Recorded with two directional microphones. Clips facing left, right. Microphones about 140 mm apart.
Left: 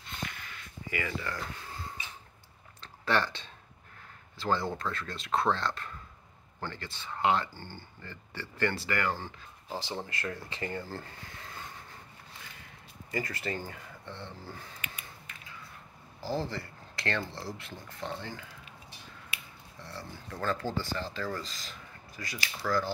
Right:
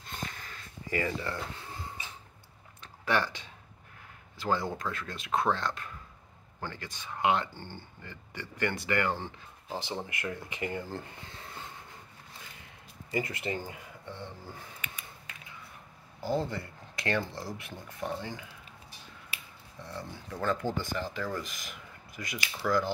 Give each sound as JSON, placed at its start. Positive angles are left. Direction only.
{"t": 0.1, "sound": "a sound", "side_deg": -35}
{"t": 2.8, "sound": "a sound", "side_deg": -10}
{"t": 4.4, "sound": "speech", "side_deg": -15}
{"t": 13.1, "sound": "speech", "side_deg": -20}
{"t": 16.2, "sound": "speech", "side_deg": -20}
{"t": 19.8, "sound": "speech", "side_deg": -20}
{"t": 22.6, "sound": "speech", "side_deg": -5}